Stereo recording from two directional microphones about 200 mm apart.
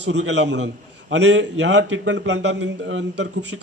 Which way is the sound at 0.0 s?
60° right (ahead or behind).